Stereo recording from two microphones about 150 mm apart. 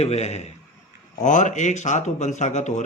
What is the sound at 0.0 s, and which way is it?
Speech, 45° left (ahead or behind).